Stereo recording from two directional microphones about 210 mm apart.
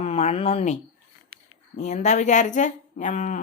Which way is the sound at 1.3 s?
45° right (ahead or behind).